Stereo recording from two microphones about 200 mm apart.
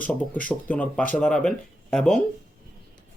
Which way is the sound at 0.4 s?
5° left (ahead or behind).